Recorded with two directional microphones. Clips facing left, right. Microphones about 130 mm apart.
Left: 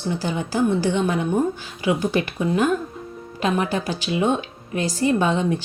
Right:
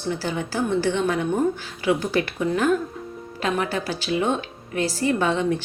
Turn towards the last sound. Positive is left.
turn(degrees=15)  # may be behind; listen again after turning